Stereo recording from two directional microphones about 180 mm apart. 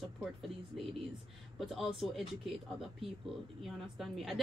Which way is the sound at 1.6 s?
Centre (ahead or behind).